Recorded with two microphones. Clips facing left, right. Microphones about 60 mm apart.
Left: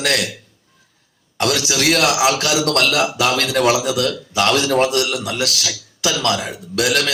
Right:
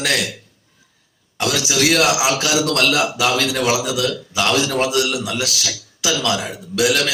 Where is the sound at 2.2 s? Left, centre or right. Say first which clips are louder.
Left 1 dB; left.